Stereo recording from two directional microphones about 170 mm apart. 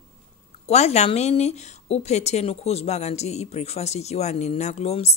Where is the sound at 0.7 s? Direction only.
40° left (ahead or behind).